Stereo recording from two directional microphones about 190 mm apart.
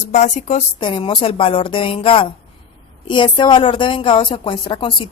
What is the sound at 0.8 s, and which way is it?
Speech, 25° left (ahead or behind).